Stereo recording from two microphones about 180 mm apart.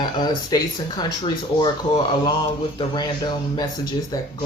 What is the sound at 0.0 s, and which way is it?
Speech, 25° left (ahead or behind).